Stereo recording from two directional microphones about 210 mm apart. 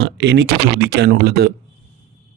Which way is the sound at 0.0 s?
55° right (ahead or behind).